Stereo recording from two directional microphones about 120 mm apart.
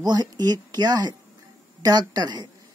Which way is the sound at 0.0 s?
35° right (ahead or behind).